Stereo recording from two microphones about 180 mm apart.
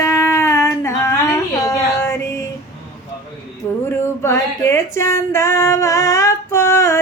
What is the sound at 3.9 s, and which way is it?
Female singing, 15° left (ahead or behind).